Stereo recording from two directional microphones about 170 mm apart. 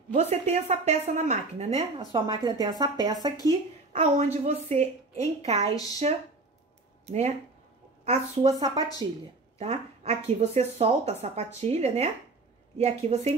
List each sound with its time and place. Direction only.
0.1 s speech: 40° right (ahead or behind)
2.0 s speech: 25° right (ahead or behind)
3.9 s speech: 45° right (ahead or behind)
9.0 s speech: 25° right (ahead or behind)
9.6 s speech: 40° right (ahead or behind)